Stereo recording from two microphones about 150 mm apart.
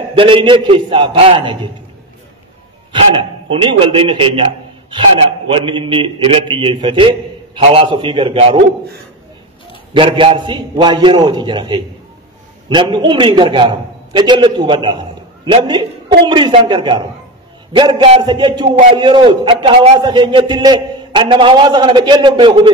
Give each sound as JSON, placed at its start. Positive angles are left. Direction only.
{"t": 0.2, "sound": "a man's voice", "side_deg": -35}
{"t": 2.9, "sound": "a man's voice", "side_deg": -35}
{"t": 5.5, "sound": "a man's voice", "side_deg": -35}
{"t": 9.9, "sound": "a man's voice", "side_deg": -35}
{"t": 18.2, "sound": "music", "side_deg": -30}
{"t": 18.9, "sound": "a man's voice", "side_deg": -30}
{"t": 20.0, "sound": "a man's voice", "side_deg": -30}